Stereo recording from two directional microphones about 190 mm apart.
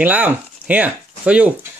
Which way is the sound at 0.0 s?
10° right (ahead or behind).